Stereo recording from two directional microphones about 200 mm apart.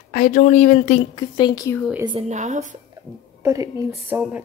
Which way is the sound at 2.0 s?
25° right (ahead or behind).